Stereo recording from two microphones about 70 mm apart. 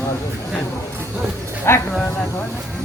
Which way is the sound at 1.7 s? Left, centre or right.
Left.